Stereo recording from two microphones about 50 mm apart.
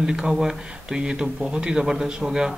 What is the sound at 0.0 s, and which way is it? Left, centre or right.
Speech, centre.